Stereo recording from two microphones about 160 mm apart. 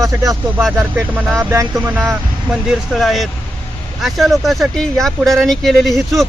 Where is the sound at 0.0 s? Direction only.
20° right (ahead or behind).